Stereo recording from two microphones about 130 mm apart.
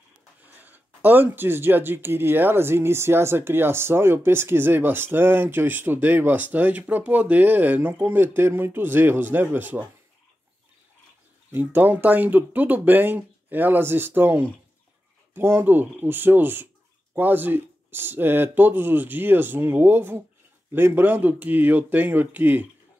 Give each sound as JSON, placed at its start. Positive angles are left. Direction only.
{"t": 0.5, "sound": "speech", "side_deg": -15}
{"t": 11.5, "sound": "speech", "side_deg": -15}